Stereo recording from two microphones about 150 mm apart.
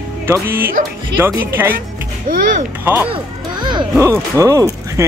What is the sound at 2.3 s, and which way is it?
Speech, 65° right (ahead or behind).